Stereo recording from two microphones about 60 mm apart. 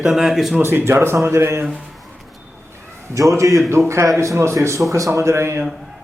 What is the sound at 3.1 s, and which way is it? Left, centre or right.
A man's voice, right.